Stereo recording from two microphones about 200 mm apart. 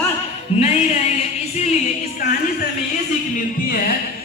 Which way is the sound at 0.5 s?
30° left (ahead or behind).